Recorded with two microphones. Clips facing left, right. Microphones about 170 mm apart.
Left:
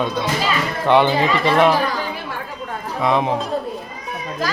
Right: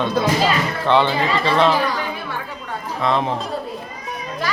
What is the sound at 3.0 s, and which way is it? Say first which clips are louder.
Speech: left 2 dB; 15° left (ahead or behind).